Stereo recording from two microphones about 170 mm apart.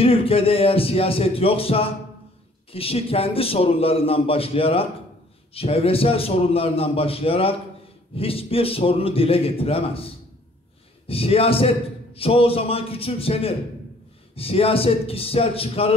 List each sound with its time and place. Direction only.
0.0 s a man's voice: 35° left (ahead or behind)
11.1 s a man's voice: 35° left (ahead or behind)